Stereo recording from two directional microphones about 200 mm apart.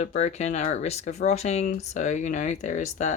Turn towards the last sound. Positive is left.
turn(degrees=40)  # may be behind; listen again after turning